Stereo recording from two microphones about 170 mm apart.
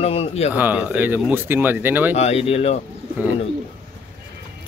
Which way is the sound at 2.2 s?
40° left (ahead or behind).